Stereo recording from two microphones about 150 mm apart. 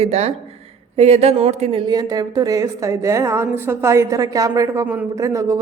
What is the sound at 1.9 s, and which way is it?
A woman's voice, 25° right (ahead or behind).